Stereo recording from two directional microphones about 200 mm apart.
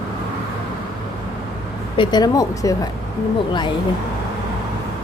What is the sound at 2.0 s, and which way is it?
Speech, 20° left (ahead or behind).